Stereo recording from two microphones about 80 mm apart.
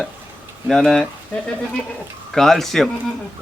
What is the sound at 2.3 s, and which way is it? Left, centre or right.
Speech, centre.